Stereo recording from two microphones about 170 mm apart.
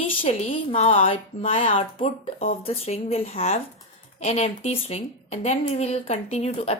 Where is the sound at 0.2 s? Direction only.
35° left (ahead or behind).